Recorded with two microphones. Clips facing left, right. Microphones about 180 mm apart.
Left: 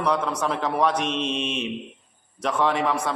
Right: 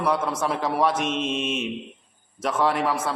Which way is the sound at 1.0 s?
50° right (ahead or behind).